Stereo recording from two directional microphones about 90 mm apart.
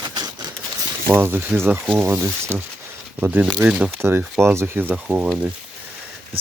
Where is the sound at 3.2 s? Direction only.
15° right (ahead or behind).